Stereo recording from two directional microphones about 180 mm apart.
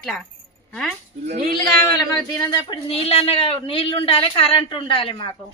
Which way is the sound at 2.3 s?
25° left (ahead or behind).